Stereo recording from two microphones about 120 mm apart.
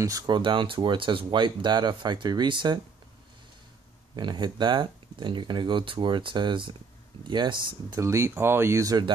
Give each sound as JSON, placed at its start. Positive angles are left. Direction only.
{"t": 0.0, "sound": "speech", "side_deg": -30}
{"t": 0.4, "sound": "speech", "side_deg": -45}
{"t": 4.2, "sound": "speech", "side_deg": -40}
{"t": 8.0, "sound": "speech", "side_deg": -25}